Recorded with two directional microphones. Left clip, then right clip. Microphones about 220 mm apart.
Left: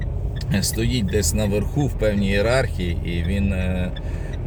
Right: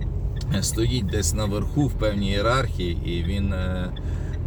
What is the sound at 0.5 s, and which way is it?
Speech, 5° left (ahead or behind).